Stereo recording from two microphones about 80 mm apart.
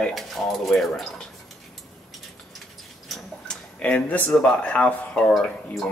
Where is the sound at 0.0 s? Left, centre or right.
Centre.